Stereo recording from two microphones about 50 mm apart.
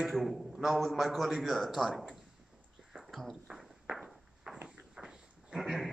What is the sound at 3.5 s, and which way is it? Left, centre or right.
Walk, centre.